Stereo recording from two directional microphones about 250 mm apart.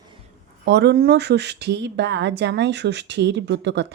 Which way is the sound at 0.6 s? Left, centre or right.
Right.